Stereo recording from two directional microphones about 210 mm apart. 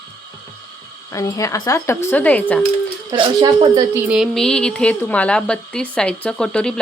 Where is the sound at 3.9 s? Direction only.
5° right (ahead or behind).